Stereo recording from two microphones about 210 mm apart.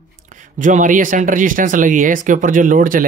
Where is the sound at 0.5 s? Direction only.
40° right (ahead or behind).